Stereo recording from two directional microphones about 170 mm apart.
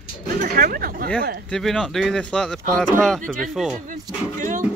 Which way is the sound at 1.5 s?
Centre (ahead or behind).